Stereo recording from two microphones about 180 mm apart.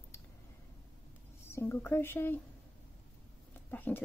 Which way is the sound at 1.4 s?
15° left (ahead or behind).